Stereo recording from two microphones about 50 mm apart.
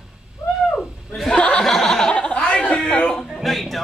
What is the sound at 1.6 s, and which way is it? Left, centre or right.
Snicker, centre.